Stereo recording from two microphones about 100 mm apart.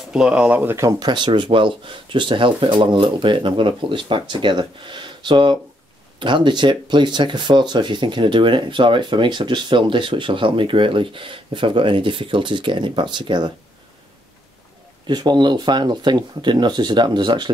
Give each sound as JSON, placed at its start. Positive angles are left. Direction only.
{"t": 0.0, "sound": "speech", "side_deg": -5}
{"t": 0.9, "sound": "speech", "side_deg": -50}
{"t": 15.0, "sound": "speech", "side_deg": -45}